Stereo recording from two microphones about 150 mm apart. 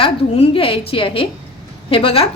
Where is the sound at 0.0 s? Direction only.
35° left (ahead or behind).